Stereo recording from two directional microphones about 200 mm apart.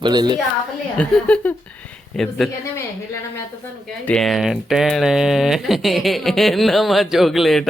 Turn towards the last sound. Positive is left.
turn(degrees=0)  # may be behind; listen again after turning